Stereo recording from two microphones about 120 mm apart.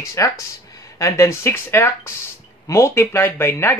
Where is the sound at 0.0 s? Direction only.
25° left (ahead or behind).